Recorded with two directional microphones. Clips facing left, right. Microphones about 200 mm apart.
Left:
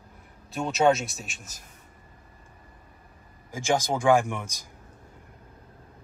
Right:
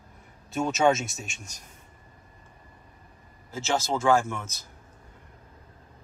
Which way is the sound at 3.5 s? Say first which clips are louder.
Left 2 dB; 15° left (ahead or behind).